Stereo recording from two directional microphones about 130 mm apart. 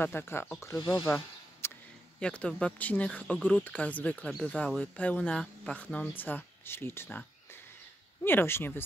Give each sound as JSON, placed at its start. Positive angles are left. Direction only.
{"t": 0.0, "sound": "speech", "side_deg": 15}
{"t": 2.1, "sound": "speech", "side_deg": 10}